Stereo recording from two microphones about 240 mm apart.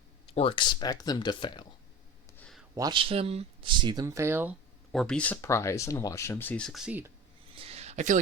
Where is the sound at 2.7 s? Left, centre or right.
Centre.